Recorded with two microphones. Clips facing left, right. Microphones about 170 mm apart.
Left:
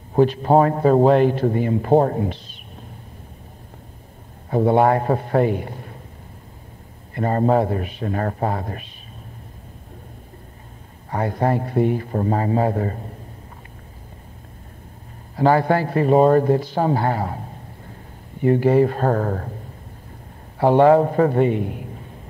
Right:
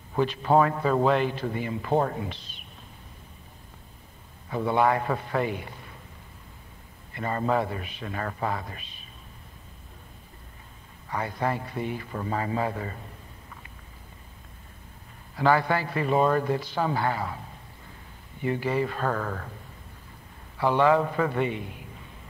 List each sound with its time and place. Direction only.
0.1 s speech: 40° left (ahead or behind)
4.5 s a man's voice: 45° left (ahead or behind)
7.2 s a man's voice: 45° left (ahead or behind)
11.1 s a man's voice: 45° left (ahead or behind)
15.3 s a man's voice: 40° left (ahead or behind)
20.5 s a man's voice: 45° left (ahead or behind)